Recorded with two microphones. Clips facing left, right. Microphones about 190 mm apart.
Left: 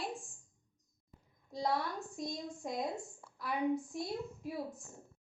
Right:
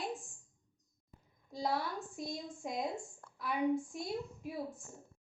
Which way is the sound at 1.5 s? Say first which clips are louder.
Left 1 dB; centre (ahead or behind).